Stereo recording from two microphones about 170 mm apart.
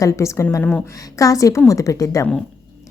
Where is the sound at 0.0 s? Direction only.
20° left (ahead or behind).